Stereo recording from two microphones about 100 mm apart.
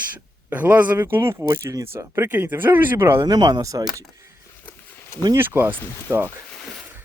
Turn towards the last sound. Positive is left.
turn(degrees=-25)  # may be behind; listen again after turning